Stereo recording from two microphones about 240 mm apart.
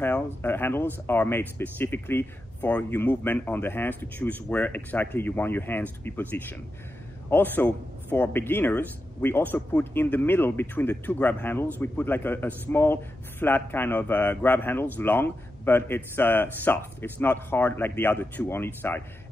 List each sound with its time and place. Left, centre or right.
0.0 s a man's voice: centre